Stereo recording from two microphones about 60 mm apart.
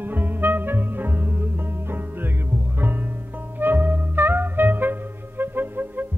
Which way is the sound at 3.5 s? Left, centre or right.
Right.